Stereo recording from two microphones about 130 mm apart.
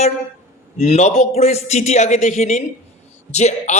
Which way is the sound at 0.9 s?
55° left (ahead or behind).